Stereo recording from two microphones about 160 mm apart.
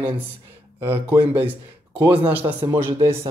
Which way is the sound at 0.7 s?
35° right (ahead or behind).